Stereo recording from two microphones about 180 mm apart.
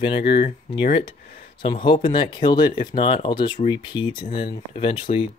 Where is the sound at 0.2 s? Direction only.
65° left (ahead or behind).